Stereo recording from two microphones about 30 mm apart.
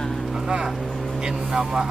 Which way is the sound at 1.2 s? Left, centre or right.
Right.